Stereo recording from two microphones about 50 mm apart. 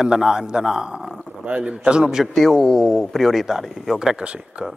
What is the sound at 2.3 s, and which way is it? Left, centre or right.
Speech, centre.